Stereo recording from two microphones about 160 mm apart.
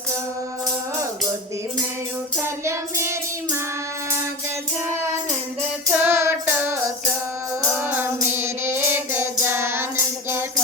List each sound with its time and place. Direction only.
2.3 s music: 15° right (ahead or behind)
5.9 s music: 15° right (ahead or behind)